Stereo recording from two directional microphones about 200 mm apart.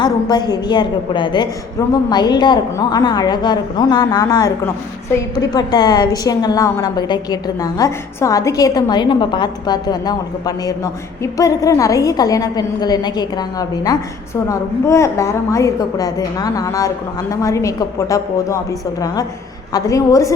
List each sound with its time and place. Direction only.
0.0 s a woman's voice: 20° left (ahead or behind)
19.7 s a woman's voice: 15° left (ahead or behind)